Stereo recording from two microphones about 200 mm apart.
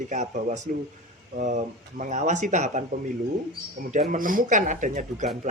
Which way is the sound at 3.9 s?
40° right (ahead or behind).